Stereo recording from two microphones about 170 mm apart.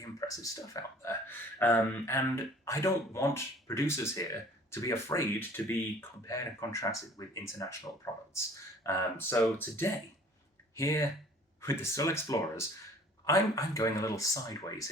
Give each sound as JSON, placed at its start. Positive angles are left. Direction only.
{"t": 0.2, "sound": "speech", "side_deg": 20}